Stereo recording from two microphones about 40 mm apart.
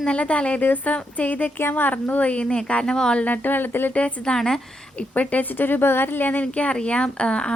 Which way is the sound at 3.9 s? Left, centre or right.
Left.